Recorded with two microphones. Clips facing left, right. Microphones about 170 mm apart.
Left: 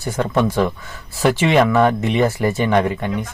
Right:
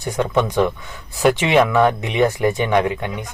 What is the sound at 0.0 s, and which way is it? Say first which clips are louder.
Speech: right 1 dB; 15° right (ahead or behind).